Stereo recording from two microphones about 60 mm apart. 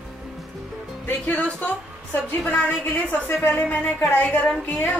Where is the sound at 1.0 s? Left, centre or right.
Left.